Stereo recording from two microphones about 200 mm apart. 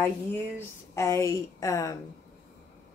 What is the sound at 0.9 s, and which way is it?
Speech, 15° left (ahead or behind).